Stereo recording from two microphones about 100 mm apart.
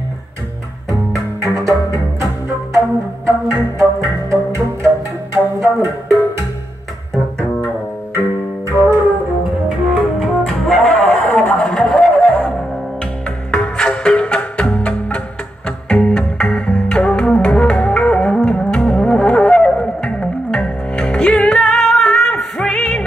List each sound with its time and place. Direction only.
1.4 s music: 30° right (ahead or behind)
3.3 s music: 30° right (ahead or behind)
8.6 s music: 30° right (ahead or behind)
9.7 s music: centre (ahead or behind)
11.6 s a sound: centre (ahead or behind)
12.2 s music: 10° left (ahead or behind)